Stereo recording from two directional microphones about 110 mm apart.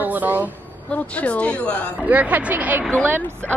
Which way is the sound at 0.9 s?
10° left (ahead or behind).